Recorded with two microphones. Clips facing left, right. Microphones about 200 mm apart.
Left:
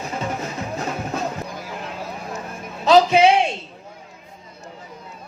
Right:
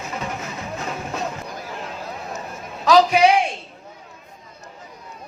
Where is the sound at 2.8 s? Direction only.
25° left (ahead or behind).